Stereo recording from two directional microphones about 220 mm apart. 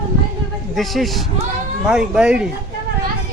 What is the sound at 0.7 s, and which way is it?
Speech, centre (ahead or behind).